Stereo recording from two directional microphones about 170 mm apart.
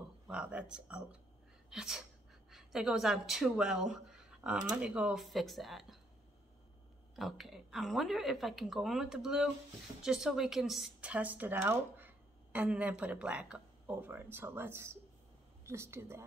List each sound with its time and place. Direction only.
0.3 s a woman's voice: 5° right (ahead or behind)
7.2 s a woman's voice: centre (ahead or behind)